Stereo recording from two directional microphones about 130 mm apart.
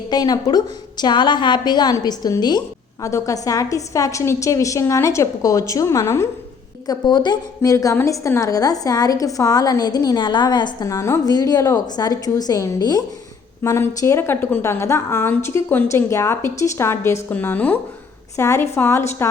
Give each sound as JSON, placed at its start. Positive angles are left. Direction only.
{"t": 0.1, "sound": "a woman's voice", "side_deg": 30}